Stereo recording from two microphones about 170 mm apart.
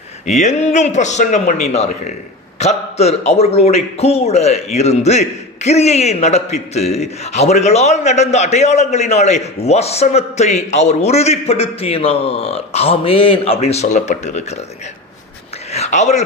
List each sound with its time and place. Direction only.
0.3 s a man's voice: 45° left (ahead or behind)
15.7 s speech: 40° left (ahead or behind)